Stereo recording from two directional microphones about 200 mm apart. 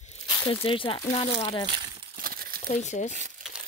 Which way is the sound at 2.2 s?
45° right (ahead or behind).